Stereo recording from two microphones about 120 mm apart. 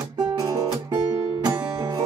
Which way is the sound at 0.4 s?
30° right (ahead or behind).